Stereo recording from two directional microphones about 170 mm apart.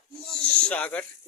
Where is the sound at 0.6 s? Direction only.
10° left (ahead or behind).